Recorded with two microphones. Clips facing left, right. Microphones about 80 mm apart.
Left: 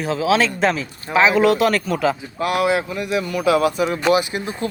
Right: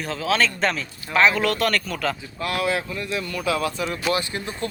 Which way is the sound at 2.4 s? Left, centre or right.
Centre.